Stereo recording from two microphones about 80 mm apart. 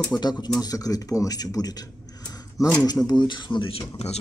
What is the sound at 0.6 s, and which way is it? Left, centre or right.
Speech, left.